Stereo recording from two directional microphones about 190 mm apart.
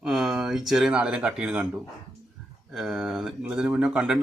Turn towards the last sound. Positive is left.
turn(degrees=-5)  # may be behind; listen again after turning